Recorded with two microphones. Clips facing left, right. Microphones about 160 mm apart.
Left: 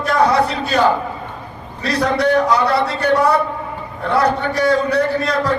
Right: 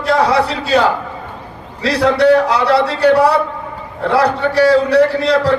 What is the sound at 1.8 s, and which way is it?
A man's voice, 65° right (ahead or behind).